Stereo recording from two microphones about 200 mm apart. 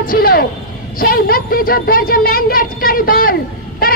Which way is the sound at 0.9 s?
45° left (ahead or behind).